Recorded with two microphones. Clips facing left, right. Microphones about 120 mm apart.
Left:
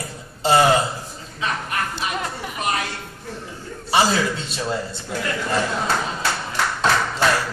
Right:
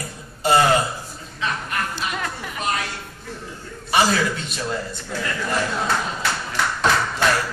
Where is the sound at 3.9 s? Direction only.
30° left (ahead or behind).